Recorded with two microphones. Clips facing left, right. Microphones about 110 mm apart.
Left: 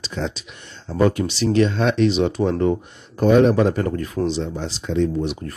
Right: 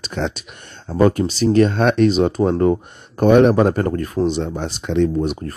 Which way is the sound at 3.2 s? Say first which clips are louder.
Right 3 dB; 60° right (ahead or behind).